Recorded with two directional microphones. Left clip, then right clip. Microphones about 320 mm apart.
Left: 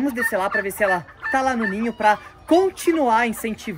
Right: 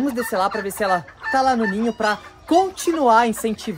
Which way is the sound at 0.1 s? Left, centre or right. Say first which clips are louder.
Even; centre.